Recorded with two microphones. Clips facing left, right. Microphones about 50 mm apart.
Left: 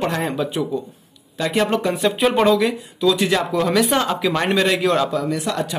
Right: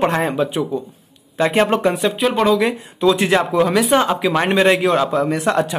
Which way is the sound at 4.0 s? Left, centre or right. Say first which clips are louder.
Right 3 dB; centre.